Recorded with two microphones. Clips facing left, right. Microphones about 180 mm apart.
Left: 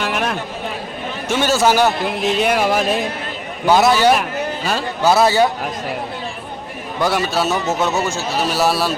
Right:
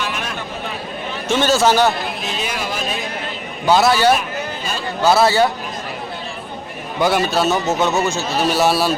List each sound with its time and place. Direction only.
0.0 s a sound: 60° left (ahead or behind)
1.3 s a man's voice: 10° left (ahead or behind)
2.2 s music: 65° left (ahead or behind)
3.7 s a man's voice: 15° left (ahead or behind)
4.2 s a sound: 70° left (ahead or behind)
5.0 s a man's voice: 15° left (ahead or behind)
7.0 s a man's voice: centre (ahead or behind)